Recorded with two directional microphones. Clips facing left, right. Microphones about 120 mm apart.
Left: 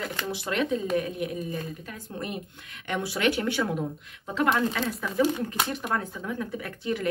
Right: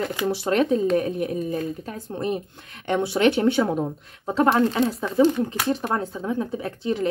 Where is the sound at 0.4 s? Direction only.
40° right (ahead or behind).